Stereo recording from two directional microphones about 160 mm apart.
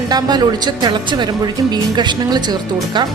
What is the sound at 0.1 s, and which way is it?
Speech, 25° right (ahead or behind).